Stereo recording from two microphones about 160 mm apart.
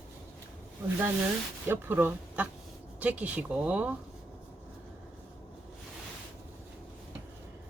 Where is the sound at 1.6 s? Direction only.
15° right (ahead or behind).